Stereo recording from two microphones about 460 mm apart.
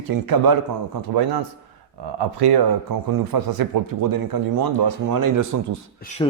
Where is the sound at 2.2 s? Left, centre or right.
Right.